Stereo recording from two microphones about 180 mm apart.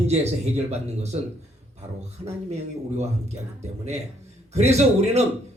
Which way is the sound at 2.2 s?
35° right (ahead or behind).